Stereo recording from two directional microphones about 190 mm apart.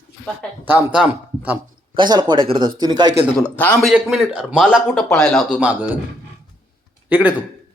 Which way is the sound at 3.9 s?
5° right (ahead or behind).